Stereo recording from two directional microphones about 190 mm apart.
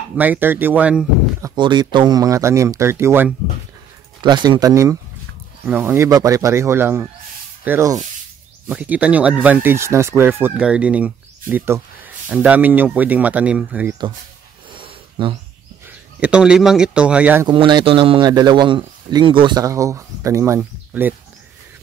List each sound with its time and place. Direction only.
0.1 s speech: 10° right (ahead or behind)
1.5 s speech: 25° right (ahead or behind)
4.2 s speech: 25° right (ahead or behind); by 13.9 s 10° right (ahead or behind)
14.8 s a sound: 25° right (ahead or behind)
16.2 s speech: 5° right (ahead or behind)
17.5 s speech: 25° right (ahead or behind)